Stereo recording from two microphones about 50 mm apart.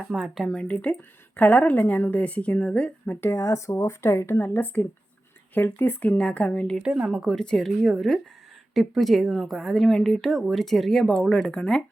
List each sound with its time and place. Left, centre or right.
0.0 s speech: centre
0.7 s a woman's voice: left
3.3 s speech: left
4.6 s speech: left
6.1 s a woman's voice: left
6.8 s speech: centre
7.3 s speech: centre
7.8 s speech: centre
11.4 s a woman's voice: centre